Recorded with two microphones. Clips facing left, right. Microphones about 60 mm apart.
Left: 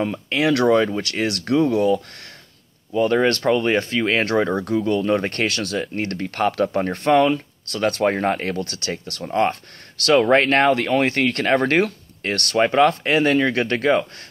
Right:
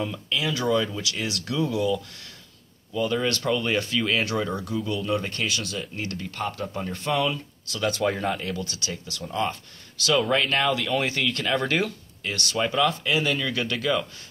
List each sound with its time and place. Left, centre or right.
0.0 s speech: left
0.4 s speech: left
6.3 s speech: left